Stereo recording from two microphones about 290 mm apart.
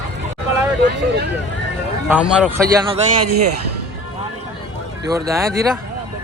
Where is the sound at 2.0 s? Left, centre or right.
Centre.